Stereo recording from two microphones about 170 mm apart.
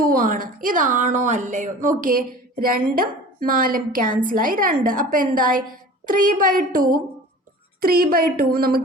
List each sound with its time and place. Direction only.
0.0 s a woman's voice: 55° right (ahead or behind)